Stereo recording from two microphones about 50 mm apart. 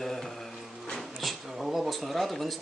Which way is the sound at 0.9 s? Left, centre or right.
Centre.